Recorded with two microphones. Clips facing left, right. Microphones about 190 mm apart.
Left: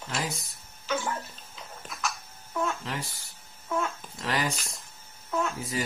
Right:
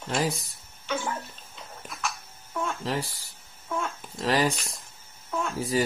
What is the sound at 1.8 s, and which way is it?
Babbling, centre (ahead or behind).